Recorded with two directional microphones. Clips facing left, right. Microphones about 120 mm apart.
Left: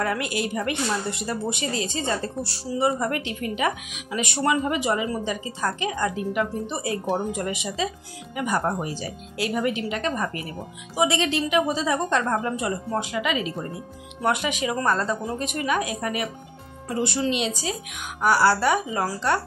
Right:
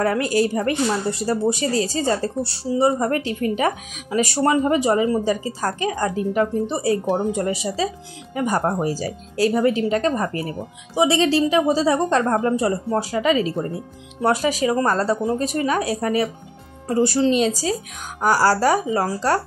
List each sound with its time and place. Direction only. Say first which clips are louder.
0.0 s speech: right 7 dB; 35° right (ahead or behind)